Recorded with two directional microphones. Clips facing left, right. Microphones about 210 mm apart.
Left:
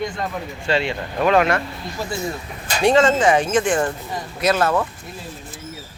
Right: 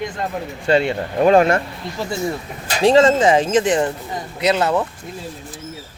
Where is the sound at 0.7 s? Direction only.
35° right (ahead or behind).